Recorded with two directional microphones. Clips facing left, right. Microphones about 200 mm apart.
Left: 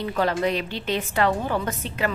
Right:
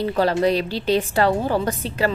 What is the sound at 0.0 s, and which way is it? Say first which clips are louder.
A woman's voice: right 4 dB; 35° right (ahead or behind).